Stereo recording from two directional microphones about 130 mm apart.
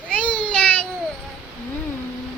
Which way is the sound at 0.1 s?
10° left (ahead or behind).